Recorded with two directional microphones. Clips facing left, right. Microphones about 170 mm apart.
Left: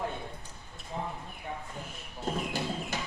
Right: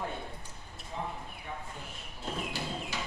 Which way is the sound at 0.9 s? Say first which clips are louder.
Left 2 dB; 45° left (ahead or behind).